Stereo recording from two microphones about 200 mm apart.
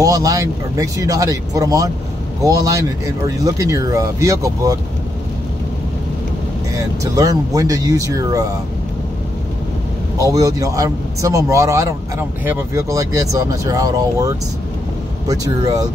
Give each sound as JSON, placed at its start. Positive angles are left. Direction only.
{"t": 0.0, "sound": "speech", "side_deg": -15}
{"t": 7.0, "sound": "speech", "side_deg": -15}
{"t": 10.1, "sound": "speech", "side_deg": -15}